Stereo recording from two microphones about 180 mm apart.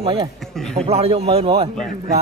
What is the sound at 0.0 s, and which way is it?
Speech, 30° right (ahead or behind).